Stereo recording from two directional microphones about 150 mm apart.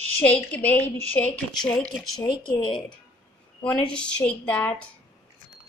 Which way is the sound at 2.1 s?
30° left (ahead or behind).